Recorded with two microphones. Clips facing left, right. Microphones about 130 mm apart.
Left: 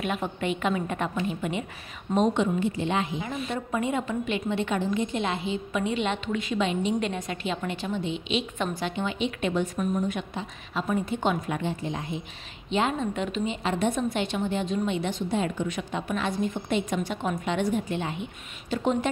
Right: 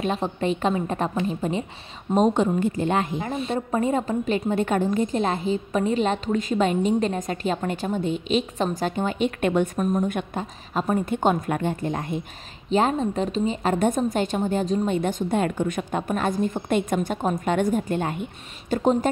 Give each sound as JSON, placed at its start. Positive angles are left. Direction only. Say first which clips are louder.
{"t": 0.0, "sound": "a woman's voice", "louder": "right 4 dB", "side_deg": -30}
{"t": 2.1, "sound": "a woman's voice", "louder": "right 4 dB", "side_deg": -40}
{"t": 3.3, "sound": "a woman's voice", "louder": "right 5 dB", "side_deg": -30}
{"t": 12.6, "sound": "a woman's voice", "louder": "right 5 dB", "side_deg": -40}